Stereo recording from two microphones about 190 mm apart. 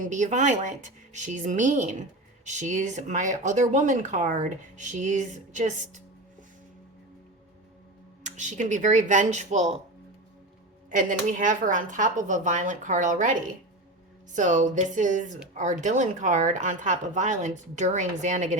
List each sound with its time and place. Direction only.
0.0 s speech: 40° right (ahead or behind)
8.2 s speech: 40° right (ahead or behind)
10.9 s speech: 45° right (ahead or behind)